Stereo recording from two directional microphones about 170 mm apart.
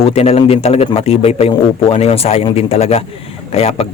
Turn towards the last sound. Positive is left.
turn(degrees=35)  # may be behind; listen again after turning